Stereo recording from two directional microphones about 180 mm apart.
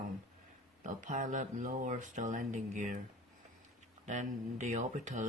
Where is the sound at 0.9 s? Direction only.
45° right (ahead or behind).